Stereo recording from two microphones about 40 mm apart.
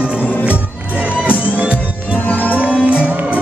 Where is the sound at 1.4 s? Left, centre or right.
Right.